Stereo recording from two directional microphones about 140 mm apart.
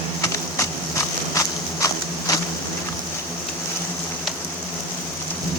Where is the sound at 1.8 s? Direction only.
25° left (ahead or behind).